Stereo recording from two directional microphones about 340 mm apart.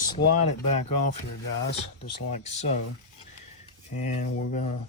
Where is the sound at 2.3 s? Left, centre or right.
Centre.